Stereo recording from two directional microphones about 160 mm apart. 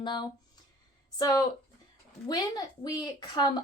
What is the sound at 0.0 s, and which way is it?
A woman's voice, 30° left (ahead or behind).